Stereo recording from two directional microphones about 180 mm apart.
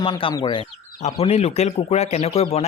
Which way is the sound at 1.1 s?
35° left (ahead or behind).